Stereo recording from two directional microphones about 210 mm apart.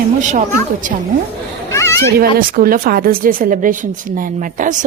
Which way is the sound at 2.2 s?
45° right (ahead or behind).